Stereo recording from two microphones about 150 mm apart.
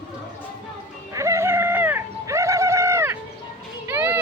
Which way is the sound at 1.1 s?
20° right (ahead or behind).